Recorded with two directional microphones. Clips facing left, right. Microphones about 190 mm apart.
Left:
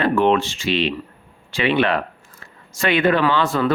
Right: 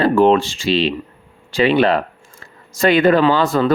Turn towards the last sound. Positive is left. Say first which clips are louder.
# right 4 dB
turn(degrees=-40)  # may be behind; listen again after turning